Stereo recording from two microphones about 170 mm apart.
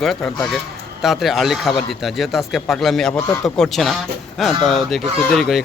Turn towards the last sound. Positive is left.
turn(degrees=0)  # may be behind; listen again after turning